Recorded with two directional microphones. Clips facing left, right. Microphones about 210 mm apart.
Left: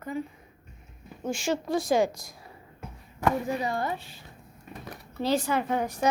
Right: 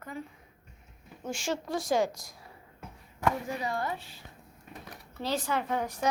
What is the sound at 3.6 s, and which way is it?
Speech, 20° left (ahead or behind).